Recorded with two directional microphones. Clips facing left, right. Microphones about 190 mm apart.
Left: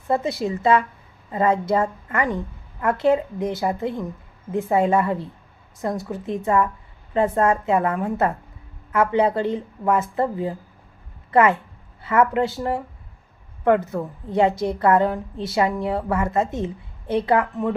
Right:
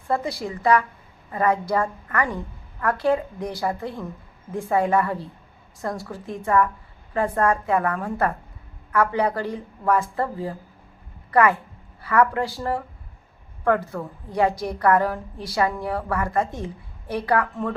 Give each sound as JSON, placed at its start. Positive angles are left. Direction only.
{"t": 0.1, "sound": "a woman's voice", "side_deg": 25}